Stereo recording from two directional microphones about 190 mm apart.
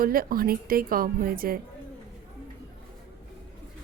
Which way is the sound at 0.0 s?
50° right (ahead or behind).